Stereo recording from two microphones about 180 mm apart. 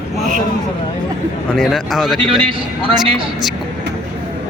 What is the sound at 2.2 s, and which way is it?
Speech, 30° right (ahead or behind).